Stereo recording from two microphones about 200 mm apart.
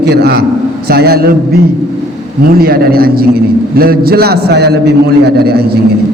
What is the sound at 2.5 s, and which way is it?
A man's voice, 50° right (ahead or behind).